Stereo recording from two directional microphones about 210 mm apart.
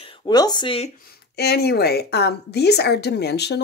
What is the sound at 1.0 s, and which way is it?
A woman's voice, 50° left (ahead or behind).